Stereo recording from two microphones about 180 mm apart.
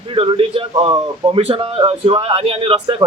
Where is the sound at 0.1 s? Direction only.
30° right (ahead or behind).